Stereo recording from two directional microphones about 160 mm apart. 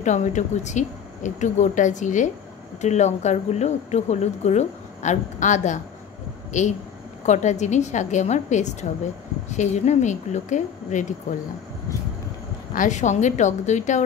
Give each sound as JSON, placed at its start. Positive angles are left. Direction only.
{"t": 0.0, "sound": "a woman's voice", "side_deg": 50}
{"t": 12.7, "sound": "a woman's voice", "side_deg": 50}